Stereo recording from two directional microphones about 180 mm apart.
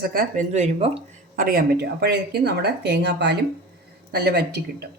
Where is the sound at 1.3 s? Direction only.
55° right (ahead or behind).